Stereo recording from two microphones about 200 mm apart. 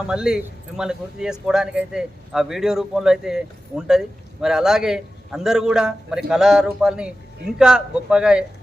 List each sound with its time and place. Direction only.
0.1 s speech: 5° right (ahead or behind)